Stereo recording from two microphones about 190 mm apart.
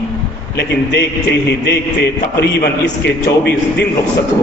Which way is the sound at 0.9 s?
60° left (ahead or behind).